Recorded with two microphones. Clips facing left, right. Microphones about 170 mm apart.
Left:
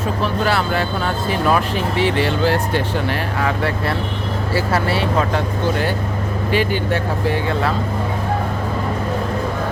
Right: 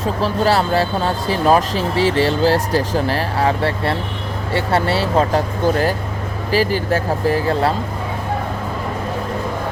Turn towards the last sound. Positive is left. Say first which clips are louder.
# right 3 dB
turn(degrees=-35)  # may be behind; listen again after turning